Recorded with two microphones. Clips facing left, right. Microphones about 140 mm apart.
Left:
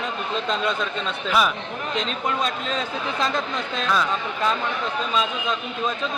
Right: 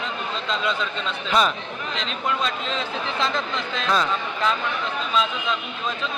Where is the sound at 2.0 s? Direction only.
45° left (ahead or behind).